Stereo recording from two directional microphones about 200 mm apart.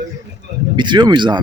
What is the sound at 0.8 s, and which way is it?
Speech, 20° right (ahead or behind).